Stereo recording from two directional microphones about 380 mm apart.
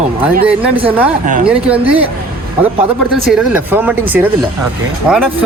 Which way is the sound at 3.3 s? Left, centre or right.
Centre.